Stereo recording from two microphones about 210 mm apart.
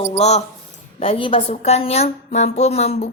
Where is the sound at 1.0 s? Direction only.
25° left (ahead or behind).